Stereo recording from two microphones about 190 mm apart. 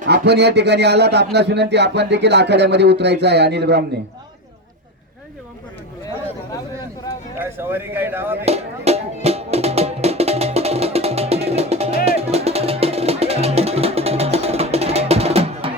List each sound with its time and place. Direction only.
0.0 s a man's voice: 60° right (ahead or behind)
7.3 s speech: 10° right (ahead or behind)
8.4 s music: 35° right (ahead or behind)